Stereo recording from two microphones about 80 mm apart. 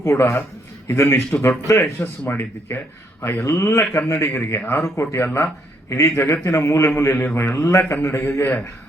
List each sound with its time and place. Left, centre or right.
0.0 s speech: left